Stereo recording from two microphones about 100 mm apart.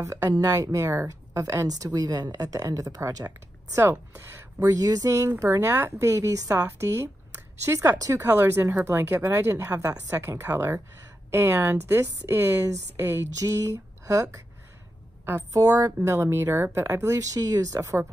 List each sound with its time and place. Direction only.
0.0 s a woman's voice: 35° right (ahead or behind)
8.3 s a woman's voice: 20° right (ahead or behind)
13.3 s a woman's voice: 35° right (ahead or behind)